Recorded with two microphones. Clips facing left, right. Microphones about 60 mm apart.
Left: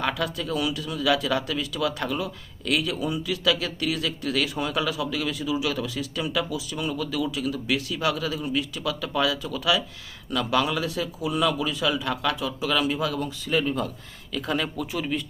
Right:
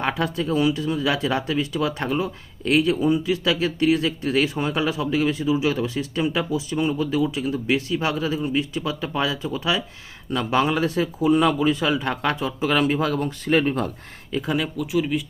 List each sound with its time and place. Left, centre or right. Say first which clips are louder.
0.0 s speech: right 3 dB; right
14.5 s speech: right 4 dB; centre